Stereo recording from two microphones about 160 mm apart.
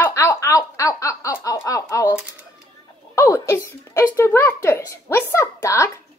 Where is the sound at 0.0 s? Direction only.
15° left (ahead or behind).